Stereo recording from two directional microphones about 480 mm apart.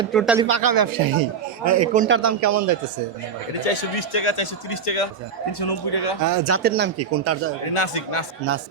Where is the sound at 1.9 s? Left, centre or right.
Centre.